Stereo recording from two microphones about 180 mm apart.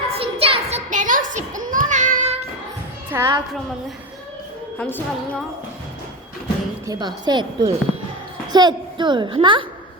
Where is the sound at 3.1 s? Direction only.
15° right (ahead or behind).